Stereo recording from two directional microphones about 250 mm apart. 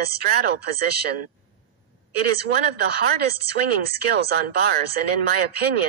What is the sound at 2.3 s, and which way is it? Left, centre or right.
Speech, right.